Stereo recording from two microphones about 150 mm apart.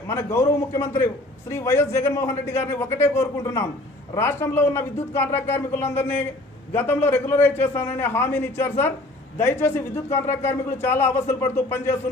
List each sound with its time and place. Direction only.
0.1 s a man's voice: 20° left (ahead or behind)